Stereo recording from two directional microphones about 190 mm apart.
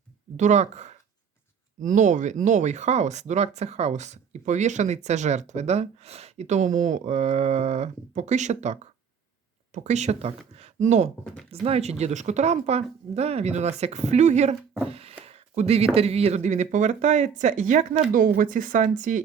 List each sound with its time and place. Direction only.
0.3 s speech: 40° right (ahead or behind)
11.2 s speech: 5° left (ahead or behind)
11.5 s speech: 30° right (ahead or behind)
14.8 s a sound: 30° right (ahead or behind)
16.0 s speech: 30° right (ahead or behind)